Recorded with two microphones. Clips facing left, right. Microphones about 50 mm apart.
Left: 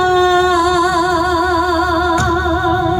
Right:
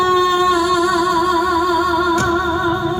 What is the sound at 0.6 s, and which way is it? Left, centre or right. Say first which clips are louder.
Music: left 2 dB; right.